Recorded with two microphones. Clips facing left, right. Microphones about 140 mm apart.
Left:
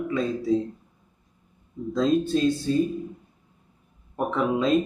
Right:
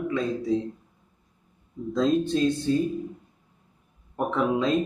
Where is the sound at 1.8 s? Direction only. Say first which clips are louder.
Left 1 dB; centre (ahead or behind).